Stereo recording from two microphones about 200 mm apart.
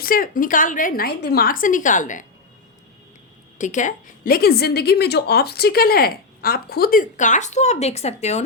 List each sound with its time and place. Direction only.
0.0 s a woman's voice: 45° left (ahead or behind)
3.6 s a woman's voice: 40° left (ahead or behind)